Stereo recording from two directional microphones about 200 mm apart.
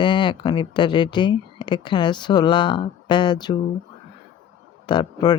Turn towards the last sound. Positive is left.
turn(degrees=20)  # may be behind; listen again after turning